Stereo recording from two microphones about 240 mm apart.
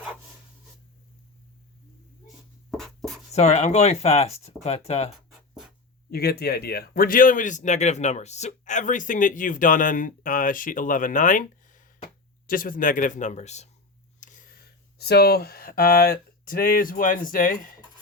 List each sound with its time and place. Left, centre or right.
2.2 s writing: centre
3.3 s speech: left
6.1 s a man's voice: left